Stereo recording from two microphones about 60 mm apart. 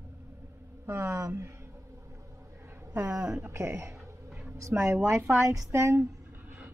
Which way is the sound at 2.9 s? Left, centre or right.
Right.